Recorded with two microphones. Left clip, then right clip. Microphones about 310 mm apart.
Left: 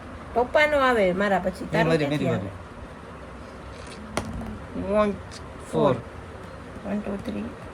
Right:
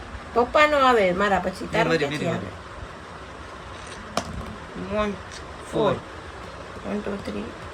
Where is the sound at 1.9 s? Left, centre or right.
Centre.